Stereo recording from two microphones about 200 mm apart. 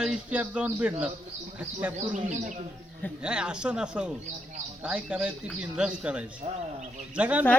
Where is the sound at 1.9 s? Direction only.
35° right (ahead or behind).